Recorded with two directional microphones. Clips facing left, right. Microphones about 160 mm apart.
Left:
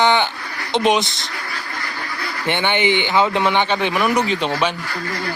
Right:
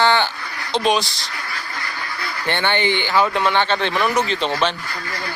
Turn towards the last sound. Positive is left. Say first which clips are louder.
# left 1 dB
turn(degrees=10)  # may be behind; listen again after turning